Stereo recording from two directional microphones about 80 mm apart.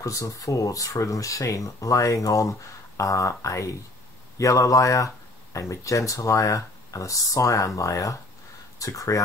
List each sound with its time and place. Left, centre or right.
0.0 s speech: left